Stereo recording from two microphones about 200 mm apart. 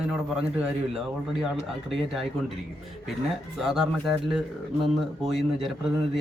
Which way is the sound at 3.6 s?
Centre (ahead or behind).